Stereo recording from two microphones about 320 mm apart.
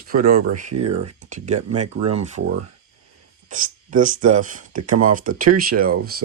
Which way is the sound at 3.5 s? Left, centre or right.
Right.